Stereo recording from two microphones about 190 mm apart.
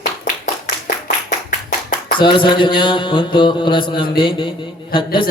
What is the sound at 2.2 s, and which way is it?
Speech, 25° left (ahead or behind).